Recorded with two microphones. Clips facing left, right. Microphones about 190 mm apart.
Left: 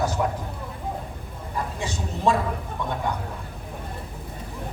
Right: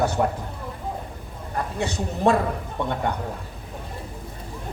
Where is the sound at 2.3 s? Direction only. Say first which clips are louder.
Right 3 dB; 60° right (ahead or behind).